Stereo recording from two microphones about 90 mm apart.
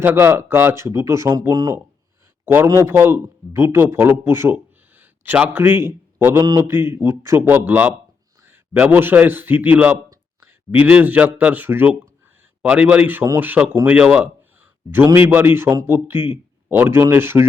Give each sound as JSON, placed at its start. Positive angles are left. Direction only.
{"t": 0.0, "sound": "speech", "side_deg": -25}
{"t": 2.4, "sound": "a man's voice", "side_deg": -25}